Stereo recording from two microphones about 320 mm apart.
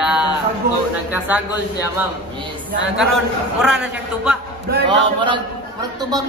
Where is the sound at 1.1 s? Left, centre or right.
Centre.